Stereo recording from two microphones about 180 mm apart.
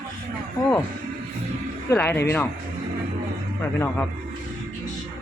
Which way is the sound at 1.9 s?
10° left (ahead or behind).